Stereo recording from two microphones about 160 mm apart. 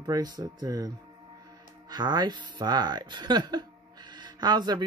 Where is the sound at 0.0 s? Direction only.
25° right (ahead or behind).